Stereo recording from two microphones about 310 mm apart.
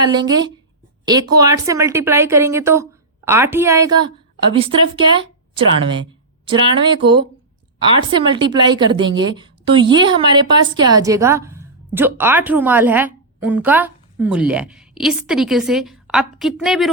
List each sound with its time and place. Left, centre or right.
0.0 s a woman's voice: centre